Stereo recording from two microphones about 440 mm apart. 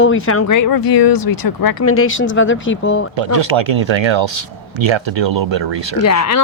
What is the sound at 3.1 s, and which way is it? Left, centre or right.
Speech, right.